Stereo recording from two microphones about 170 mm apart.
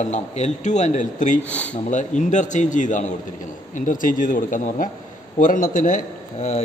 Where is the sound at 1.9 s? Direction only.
45° left (ahead or behind).